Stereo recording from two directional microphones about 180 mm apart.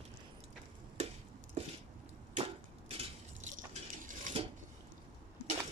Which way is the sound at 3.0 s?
40° right (ahead or behind).